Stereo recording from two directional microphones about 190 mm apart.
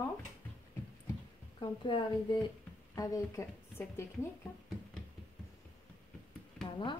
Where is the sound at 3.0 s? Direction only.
15° left (ahead or behind).